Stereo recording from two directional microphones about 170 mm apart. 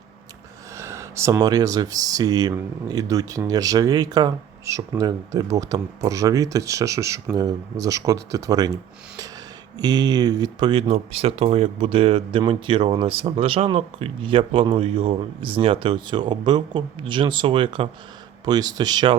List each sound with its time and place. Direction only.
0.8 s speech: 15° right (ahead or behind)